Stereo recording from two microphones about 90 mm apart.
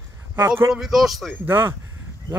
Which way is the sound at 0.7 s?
5° right (ahead or behind).